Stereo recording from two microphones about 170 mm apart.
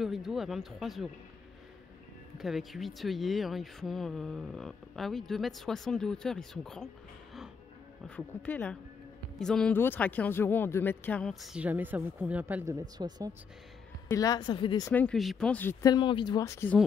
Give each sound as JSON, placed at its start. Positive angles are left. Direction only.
{"t": 0.0, "sound": "speech", "side_deg": 0}
{"t": 2.3, "sound": "speech", "side_deg": 0}
{"t": 8.3, "sound": "speech", "side_deg": 10}
{"t": 14.0, "sound": "speech", "side_deg": 20}
{"t": 14.9, "sound": "speech", "side_deg": 10}
{"t": 15.9, "sound": "speech", "side_deg": 30}